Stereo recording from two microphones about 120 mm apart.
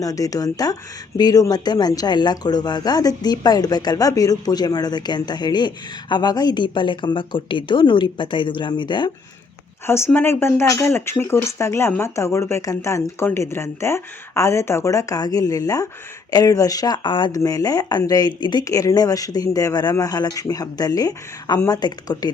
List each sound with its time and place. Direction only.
0.0 s speech: 30° left (ahead or behind)
9.8 s speech: 20° left (ahead or behind); by 17.4 s 40° left (ahead or behind)
17.4 s speech: 30° left (ahead or behind)